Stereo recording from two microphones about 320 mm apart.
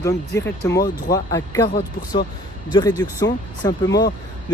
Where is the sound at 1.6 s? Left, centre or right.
Left.